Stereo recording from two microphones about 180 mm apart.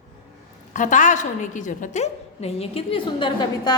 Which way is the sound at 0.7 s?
45° left (ahead or behind).